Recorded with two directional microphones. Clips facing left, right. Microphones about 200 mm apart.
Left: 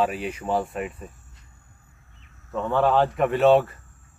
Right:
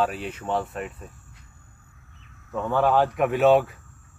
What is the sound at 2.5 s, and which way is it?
Speech, 5° right (ahead or behind).